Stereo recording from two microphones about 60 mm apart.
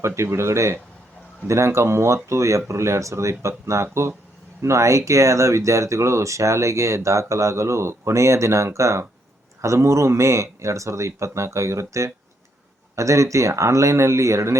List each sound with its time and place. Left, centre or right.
0.0 s speech: right